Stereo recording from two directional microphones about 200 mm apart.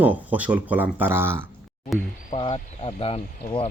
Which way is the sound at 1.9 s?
Centre (ahead or behind).